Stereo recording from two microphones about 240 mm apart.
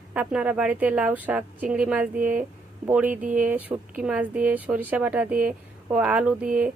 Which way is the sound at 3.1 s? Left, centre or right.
Right.